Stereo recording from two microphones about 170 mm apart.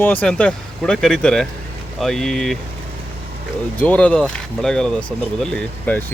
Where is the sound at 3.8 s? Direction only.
10° left (ahead or behind).